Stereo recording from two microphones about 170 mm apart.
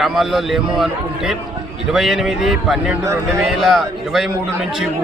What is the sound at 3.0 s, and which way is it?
Speech, 15° right (ahead or behind).